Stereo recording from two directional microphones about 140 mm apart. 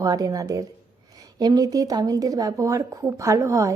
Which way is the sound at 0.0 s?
25° right (ahead or behind).